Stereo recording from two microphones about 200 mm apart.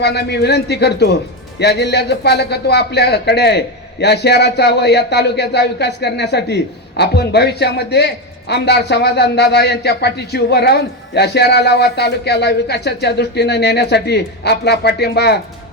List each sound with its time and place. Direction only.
0.0 s speech: 55° left (ahead or behind)